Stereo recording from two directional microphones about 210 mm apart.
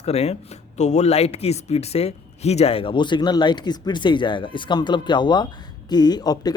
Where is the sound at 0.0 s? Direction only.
30° left (ahead or behind).